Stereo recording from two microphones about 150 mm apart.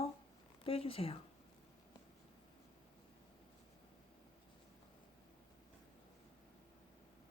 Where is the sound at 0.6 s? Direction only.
40° left (ahead or behind).